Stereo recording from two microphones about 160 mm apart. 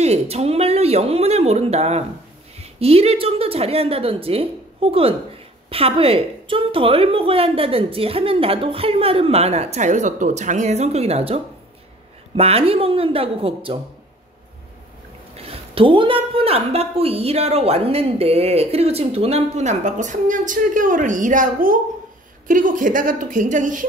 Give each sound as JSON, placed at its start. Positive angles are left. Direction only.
{"t": 0.0, "sound": "a woman's voice", "side_deg": -40}
{"t": 15.3, "sound": "a woman's voice", "side_deg": -35}